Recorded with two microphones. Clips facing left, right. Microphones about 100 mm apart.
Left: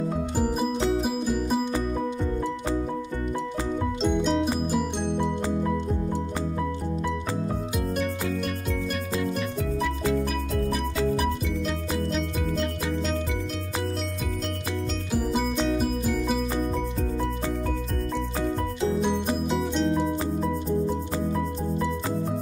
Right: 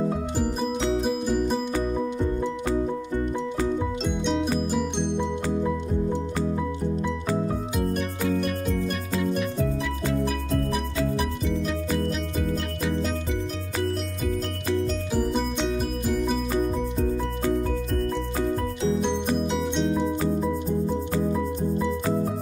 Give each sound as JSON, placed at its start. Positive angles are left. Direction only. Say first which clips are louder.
{"t": 0.4, "sound": "music", "louder": "left 3 dB", "side_deg": 5}
{"t": 4.0, "sound": "music", "louder": "left 2 dB", "side_deg": 0}
{"t": 9.2, "sound": "music", "louder": "right 3 dB", "side_deg": 0}
{"t": 15.1, "sound": "music", "louder": "left 1 dB", "side_deg": 5}
{"t": 19.6, "sound": "music", "louder": "even", "side_deg": 0}